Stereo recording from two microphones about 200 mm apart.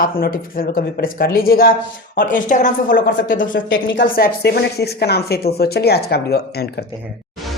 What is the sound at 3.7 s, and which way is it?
Speech, 70° left (ahead or behind).